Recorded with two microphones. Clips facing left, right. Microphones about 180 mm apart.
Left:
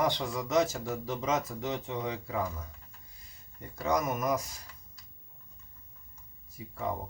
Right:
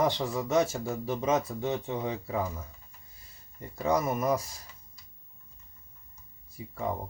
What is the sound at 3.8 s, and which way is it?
Speech, 30° right (ahead or behind).